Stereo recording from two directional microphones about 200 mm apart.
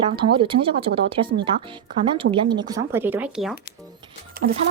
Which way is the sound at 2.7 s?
15° right (ahead or behind).